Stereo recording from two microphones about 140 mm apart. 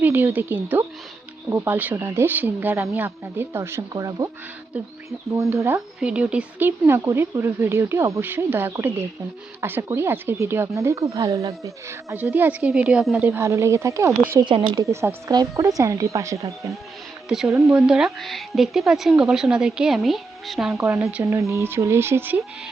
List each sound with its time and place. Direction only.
0.0 s a woman's voice: 15° right (ahead or behind)
5.4 s speech: 20° right (ahead or behind)
6.0 s a woman's voice: 10° right (ahead or behind)
13.2 s speech: 20° right (ahead or behind)
17.2 s speech: 5° right (ahead or behind)
20.7 s a woman's voice: 20° right (ahead or behind)